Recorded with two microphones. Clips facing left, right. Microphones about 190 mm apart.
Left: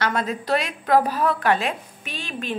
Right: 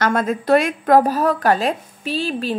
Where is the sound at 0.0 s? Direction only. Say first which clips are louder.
Right 5 dB; 50° right (ahead or behind).